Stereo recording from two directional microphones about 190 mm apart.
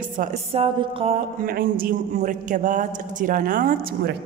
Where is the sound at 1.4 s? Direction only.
50° right (ahead or behind).